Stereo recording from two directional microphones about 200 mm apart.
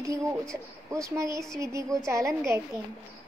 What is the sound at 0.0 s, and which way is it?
A woman's voice, 15° right (ahead or behind).